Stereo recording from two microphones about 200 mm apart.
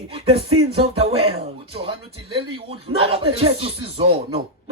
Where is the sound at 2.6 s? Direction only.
30° right (ahead or behind).